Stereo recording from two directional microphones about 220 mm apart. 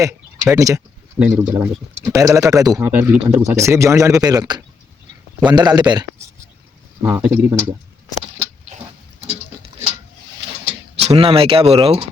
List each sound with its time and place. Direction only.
0.0 s a man's voice: 15° right (ahead or behind)
7.0 s speech: 10° right (ahead or behind)
10.7 s speech: 30° right (ahead or behind)